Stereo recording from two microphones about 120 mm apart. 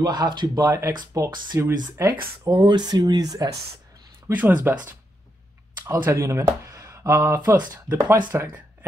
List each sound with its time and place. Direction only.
0.0 s speech: 35° right (ahead or behind)
4.3 s speech: 15° right (ahead or behind)
5.9 s speech: 25° right (ahead or behind)